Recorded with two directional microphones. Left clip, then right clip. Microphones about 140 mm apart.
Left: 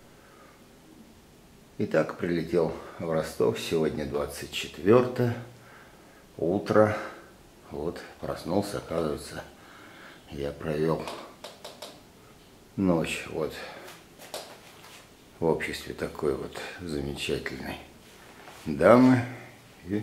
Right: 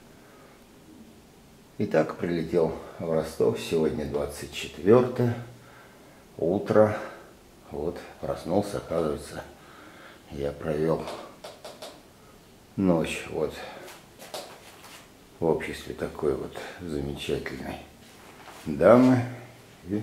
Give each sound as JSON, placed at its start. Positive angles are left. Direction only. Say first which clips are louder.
{"t": 1.8, "sound": "speech", "louder": "right 1 dB", "side_deg": 20}
{"t": 6.5, "sound": "speech", "louder": "right 1 dB", "side_deg": 20}
{"t": 12.7, "sound": "speech", "louder": "right 1 dB", "side_deg": 15}
{"t": 15.4, "sound": "speech", "louder": "right 1 dB", "side_deg": 20}
{"t": 18.8, "sound": "speech", "louder": "right 1 dB", "side_deg": 20}